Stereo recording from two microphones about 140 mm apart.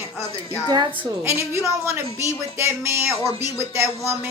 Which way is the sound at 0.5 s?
30° right (ahead or behind).